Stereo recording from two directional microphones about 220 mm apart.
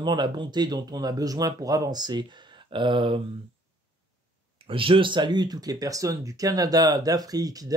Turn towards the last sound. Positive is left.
turn(degrees=-15)  # may be behind; listen again after turning